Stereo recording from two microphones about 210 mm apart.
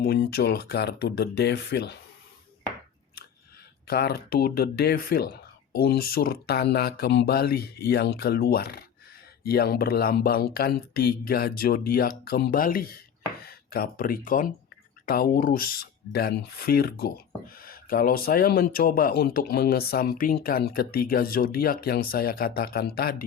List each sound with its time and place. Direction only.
0.0 s speech: 45° left (ahead or behind)
3.8 s speech: 50° left (ahead or behind)